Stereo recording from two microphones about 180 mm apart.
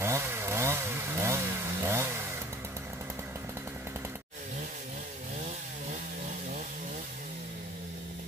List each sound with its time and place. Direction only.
0.0 s chainsaw: 15° right (ahead or behind)